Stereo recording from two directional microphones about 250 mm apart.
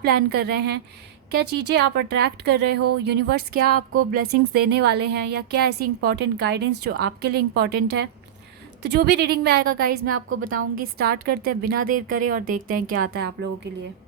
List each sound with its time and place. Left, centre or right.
0.0 s a woman's voice: right
10.0 s a woman's voice: right
10.8 s a woman's voice: right